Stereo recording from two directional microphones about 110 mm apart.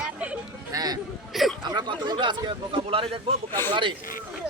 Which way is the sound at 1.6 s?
40° right (ahead or behind).